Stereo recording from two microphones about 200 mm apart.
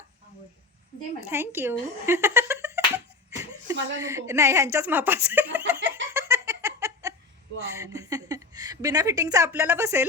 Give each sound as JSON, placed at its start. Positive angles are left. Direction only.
{"t": 1.3, "sound": "a woman's voice", "side_deg": -10}
{"t": 5.9, "sound": "giggle", "side_deg": -10}
{"t": 7.7, "sound": "a woman's voice", "side_deg": -15}